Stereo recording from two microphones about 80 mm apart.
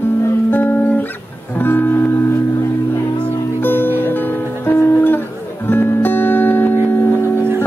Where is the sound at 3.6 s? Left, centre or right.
Left.